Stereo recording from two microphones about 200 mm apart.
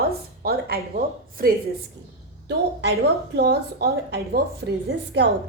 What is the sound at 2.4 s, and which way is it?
A woman's voice, 60° right (ahead or behind).